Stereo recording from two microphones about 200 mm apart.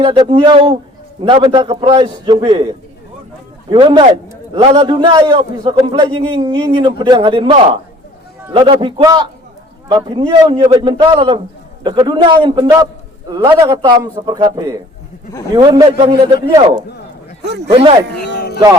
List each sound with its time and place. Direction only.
0.0 s a man's voice: 25° right (ahead or behind)
3.7 s a man's voice: 25° right (ahead or behind)